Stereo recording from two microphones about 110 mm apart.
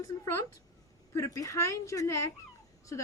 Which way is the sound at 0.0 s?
25° left (ahead or behind).